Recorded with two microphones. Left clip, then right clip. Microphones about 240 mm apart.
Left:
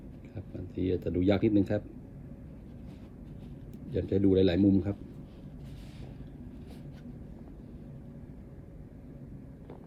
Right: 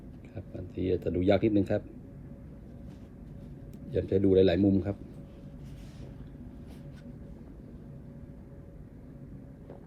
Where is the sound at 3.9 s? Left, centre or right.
Right.